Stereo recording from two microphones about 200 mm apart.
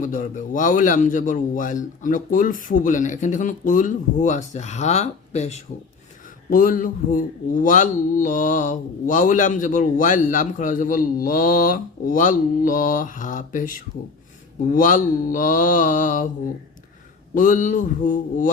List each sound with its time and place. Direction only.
0.0 s speech: 40° left (ahead or behind)
6.5 s speech: 45° left (ahead or behind)
17.3 s speech: 40° left (ahead or behind)